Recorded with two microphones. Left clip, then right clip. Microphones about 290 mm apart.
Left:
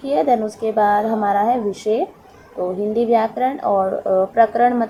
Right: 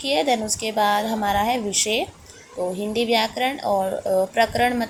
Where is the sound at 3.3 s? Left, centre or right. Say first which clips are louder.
Left 4 dB; right.